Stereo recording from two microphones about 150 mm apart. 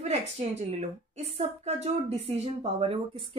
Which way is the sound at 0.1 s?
45° right (ahead or behind).